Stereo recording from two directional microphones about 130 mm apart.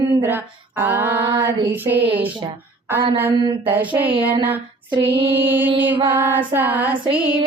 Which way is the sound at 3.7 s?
15° right (ahead or behind).